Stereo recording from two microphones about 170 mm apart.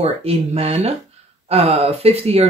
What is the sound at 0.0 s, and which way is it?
Speech, 35° right (ahead or behind).